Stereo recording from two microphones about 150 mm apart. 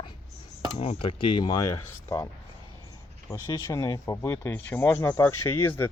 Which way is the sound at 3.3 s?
20° left (ahead or behind).